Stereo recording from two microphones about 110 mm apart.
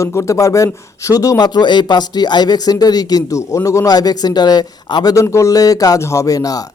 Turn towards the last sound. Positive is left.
turn(degrees=35)  # may be behind; listen again after turning